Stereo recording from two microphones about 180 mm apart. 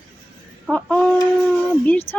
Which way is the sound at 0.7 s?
5° left (ahead or behind).